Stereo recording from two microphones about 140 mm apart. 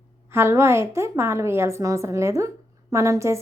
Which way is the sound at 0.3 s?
20° right (ahead or behind).